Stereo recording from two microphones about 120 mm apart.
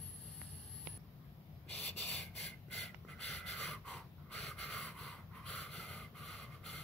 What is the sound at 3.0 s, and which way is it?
Gasp, 10° left (ahead or behind).